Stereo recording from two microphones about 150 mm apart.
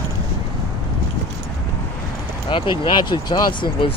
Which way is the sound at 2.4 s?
35° left (ahead or behind).